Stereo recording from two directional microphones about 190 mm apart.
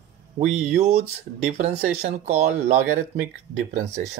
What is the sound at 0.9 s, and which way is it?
Speech, 35° right (ahead or behind).